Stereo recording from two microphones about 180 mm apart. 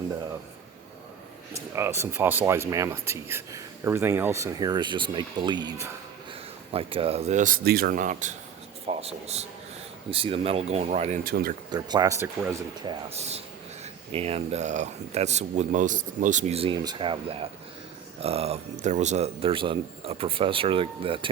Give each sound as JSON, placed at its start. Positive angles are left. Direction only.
{"t": 1.5, "sound": "speech", "side_deg": -15}
{"t": 6.7, "sound": "speech", "side_deg": -30}
{"t": 11.2, "sound": "speech", "side_deg": -55}
{"t": 11.7, "sound": "speech", "side_deg": -20}
{"t": 12.8, "sound": "speech", "side_deg": -30}